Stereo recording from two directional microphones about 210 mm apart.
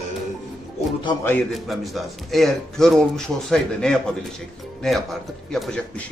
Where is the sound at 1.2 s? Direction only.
5° left (ahead or behind).